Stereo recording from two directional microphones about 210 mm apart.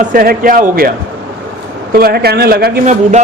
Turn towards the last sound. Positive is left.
turn(degrees=-40)  # may be behind; listen again after turning